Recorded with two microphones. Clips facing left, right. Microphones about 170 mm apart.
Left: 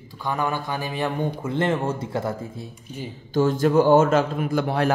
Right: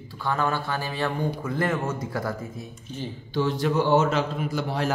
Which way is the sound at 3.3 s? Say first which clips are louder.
Left 5 dB; 45° left (ahead or behind).